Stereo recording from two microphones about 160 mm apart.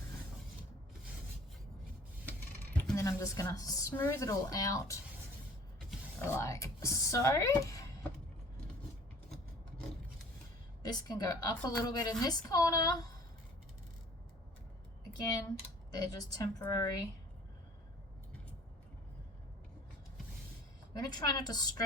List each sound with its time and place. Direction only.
2.9 s a woman's voice: 20° left (ahead or behind)
6.2 s a woman's voice: 20° left (ahead or behind)
10.8 s a woman's voice: 25° left (ahead or behind)
15.1 s a woman's voice: 25° left (ahead or behind)
20.9 s a woman's voice: 25° left (ahead or behind)